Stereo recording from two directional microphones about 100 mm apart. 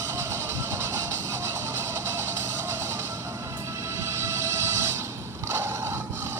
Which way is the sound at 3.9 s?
30° right (ahead or behind).